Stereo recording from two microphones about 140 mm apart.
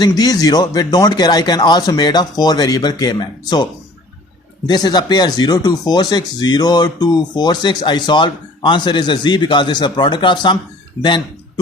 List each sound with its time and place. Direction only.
0.0 s speech: 30° left (ahead or behind)